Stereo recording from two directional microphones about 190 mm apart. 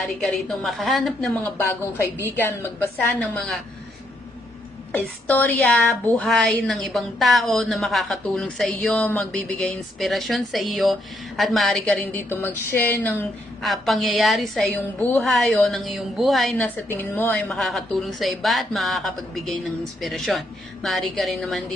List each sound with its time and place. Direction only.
0.0 s a woman's voice: centre (ahead or behind)
1.5 s a woman's voice: 15° left (ahead or behind)
4.9 s a woman's voice: 10° left (ahead or behind)
17.5 s a woman's voice: centre (ahead or behind)